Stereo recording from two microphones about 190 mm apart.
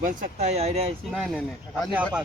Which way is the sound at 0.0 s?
40° right (ahead or behind).